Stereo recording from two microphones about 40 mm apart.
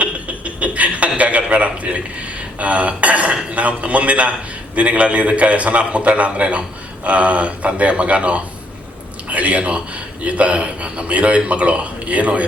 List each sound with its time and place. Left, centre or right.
0.0 s chuckle: right
2.6 s a man's voice: right